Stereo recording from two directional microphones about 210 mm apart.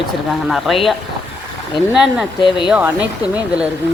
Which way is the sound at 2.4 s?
20° left (ahead or behind).